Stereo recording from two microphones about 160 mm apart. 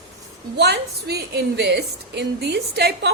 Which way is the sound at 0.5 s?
90° right.